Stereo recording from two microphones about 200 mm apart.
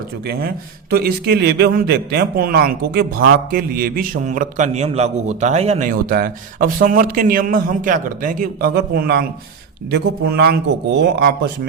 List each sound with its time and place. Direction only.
0.3 s a man's voice: 50° right (ahead or behind); by 5.9 s 30° right (ahead or behind)
5.9 s a man's voice: 45° right (ahead or behind)